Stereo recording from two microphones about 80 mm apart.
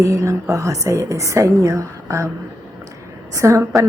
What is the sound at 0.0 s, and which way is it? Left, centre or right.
Speech, right.